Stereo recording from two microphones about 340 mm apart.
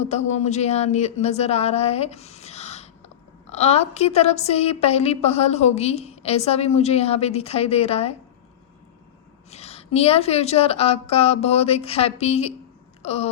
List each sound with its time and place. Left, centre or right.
0.0 s a woman's voice: centre
9.5 s a woman's voice: centre
13.0 s a sound: centre